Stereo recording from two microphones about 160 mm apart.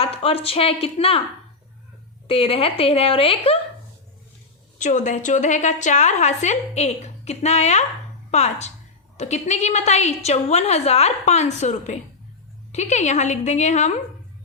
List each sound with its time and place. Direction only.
0.0 s a woman's voice: 40° left (ahead or behind)
2.2 s a woman's voice: 35° left (ahead or behind)
4.8 s a woman's voice: 50° left (ahead or behind)